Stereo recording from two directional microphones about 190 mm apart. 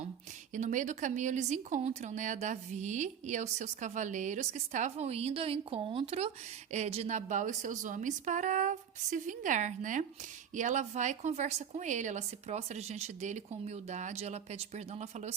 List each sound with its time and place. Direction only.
0.5 s speech: 40° right (ahead or behind)